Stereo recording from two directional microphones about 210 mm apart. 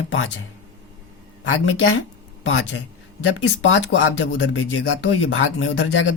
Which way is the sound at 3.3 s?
70° left (ahead or behind).